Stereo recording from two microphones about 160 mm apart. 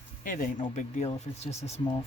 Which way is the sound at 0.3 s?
55° left (ahead or behind).